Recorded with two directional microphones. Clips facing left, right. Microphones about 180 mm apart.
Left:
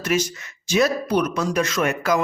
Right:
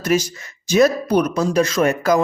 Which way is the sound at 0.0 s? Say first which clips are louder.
Right 4 dB; 35° right (ahead or behind).